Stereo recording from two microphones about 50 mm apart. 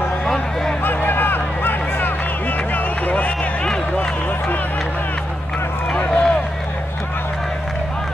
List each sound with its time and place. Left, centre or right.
0.8 s a sound: left
2.7 s run: left
5.9 s run: left